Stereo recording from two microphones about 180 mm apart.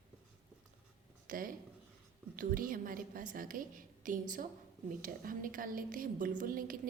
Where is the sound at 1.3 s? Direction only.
50° right (ahead or behind).